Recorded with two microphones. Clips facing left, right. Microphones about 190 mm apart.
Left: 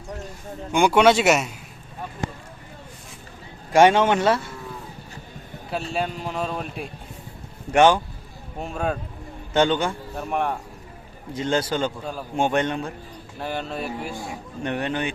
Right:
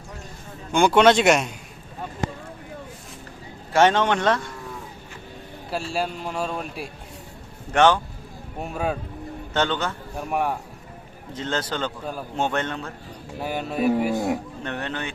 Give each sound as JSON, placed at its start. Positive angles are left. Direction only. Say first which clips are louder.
{"t": 0.7, "sound": "speech", "louder": "even", "side_deg": 10}
{"t": 3.7, "sound": "speech", "louder": "left 3 dB", "side_deg": 10}
{"t": 5.7, "sound": "speech", "louder": "even", "side_deg": 0}
{"t": 7.7, "sound": "speech", "louder": "left 2 dB", "side_deg": 10}
{"t": 8.6, "sound": "speech", "louder": "even", "side_deg": 0}
{"t": 9.5, "sound": "speech", "louder": "left 4 dB", "side_deg": 15}
{"t": 10.2, "sound": "speech", "louder": "right 1 dB", "side_deg": -5}
{"t": 11.3, "sound": "speech", "louder": "left 4 dB", "side_deg": 10}
{"t": 13.4, "sound": "speech", "louder": "right 2 dB", "side_deg": -10}
{"t": 13.8, "sound": "speech", "louder": "right 10 dB", "side_deg": -60}
{"t": 14.6, "sound": "speech", "louder": "left 4 dB", "side_deg": 15}